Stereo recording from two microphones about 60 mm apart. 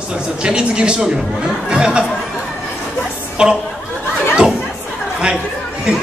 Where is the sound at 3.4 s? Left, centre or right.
Centre.